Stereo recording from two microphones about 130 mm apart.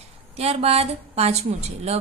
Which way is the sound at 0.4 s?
50° right (ahead or behind).